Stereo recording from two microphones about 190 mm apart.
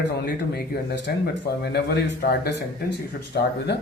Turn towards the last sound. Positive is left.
turn(degrees=65)  # may be behind; listen again after turning